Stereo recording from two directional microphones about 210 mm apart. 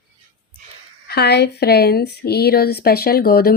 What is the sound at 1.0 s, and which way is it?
Speech, 50° left (ahead or behind).